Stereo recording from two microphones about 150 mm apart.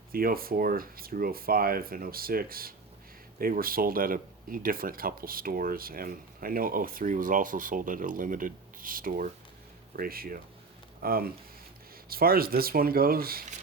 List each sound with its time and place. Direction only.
0.1 s speech: 80° right